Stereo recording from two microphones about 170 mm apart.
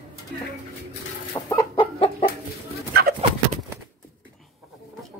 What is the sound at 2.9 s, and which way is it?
Bird, 65° right (ahead or behind).